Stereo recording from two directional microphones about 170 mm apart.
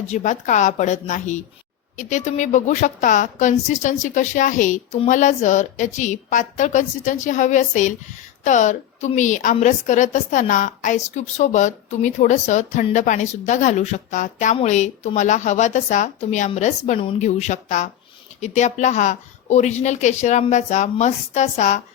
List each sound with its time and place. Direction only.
0.1 s a woman's voice: 45° left (ahead or behind)